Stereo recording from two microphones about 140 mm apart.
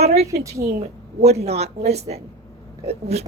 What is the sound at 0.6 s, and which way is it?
Speech, 90° right.